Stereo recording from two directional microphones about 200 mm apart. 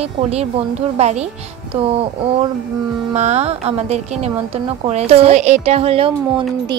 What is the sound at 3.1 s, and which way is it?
A woman's voice, 35° right (ahead or behind).